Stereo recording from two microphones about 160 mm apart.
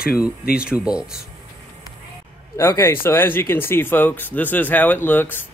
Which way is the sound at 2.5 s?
20° left (ahead or behind).